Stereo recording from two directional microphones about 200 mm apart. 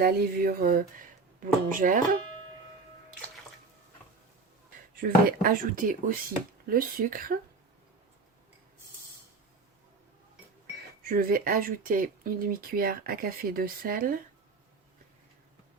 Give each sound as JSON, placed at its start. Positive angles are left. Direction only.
{"t": 0.0, "sound": "speech", "side_deg": -50}
{"t": 4.9, "sound": "speech", "side_deg": -45}
{"t": 11.0, "sound": "speech", "side_deg": -45}